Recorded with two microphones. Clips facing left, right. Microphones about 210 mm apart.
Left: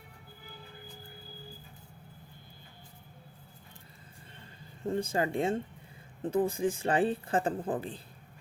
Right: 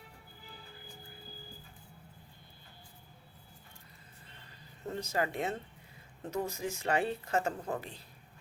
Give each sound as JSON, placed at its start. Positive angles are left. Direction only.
{"t": 4.8, "sound": "speech", "side_deg": 30}